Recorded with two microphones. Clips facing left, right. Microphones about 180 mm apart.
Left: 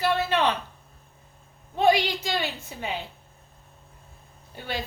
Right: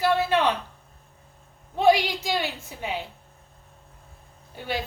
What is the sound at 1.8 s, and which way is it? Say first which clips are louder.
A woman's voice: right 2 dB; 10° right (ahead or behind).